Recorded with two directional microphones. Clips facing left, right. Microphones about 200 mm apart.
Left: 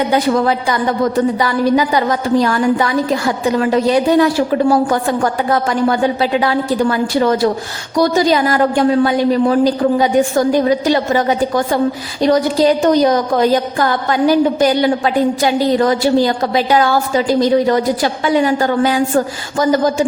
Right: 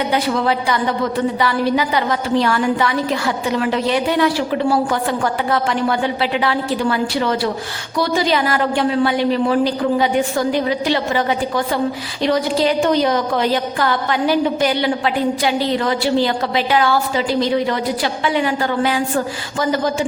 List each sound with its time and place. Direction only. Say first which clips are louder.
0.1 s a woman's voice: left 4 dB; 45° left (ahead or behind)